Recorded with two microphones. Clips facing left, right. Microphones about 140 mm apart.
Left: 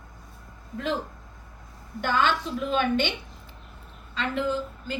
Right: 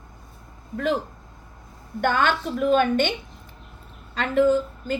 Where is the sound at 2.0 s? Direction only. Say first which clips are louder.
Right 3 dB; 50° right (ahead or behind).